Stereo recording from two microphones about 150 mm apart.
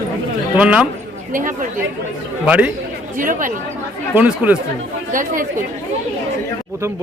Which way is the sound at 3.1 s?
60° right (ahead or behind).